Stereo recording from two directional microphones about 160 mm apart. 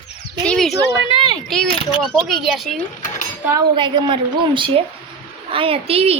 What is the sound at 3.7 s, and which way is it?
A woman's voice, 30° right (ahead or behind).